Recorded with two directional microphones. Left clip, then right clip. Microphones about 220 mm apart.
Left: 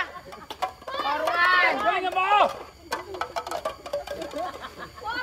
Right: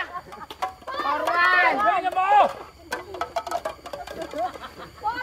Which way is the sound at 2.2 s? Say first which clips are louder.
Right 3 dB; 10° left (ahead or behind).